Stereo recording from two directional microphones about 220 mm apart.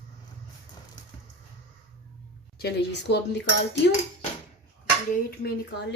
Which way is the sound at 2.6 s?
50° left (ahead or behind).